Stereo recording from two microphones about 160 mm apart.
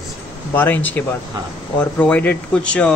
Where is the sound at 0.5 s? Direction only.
10° left (ahead or behind).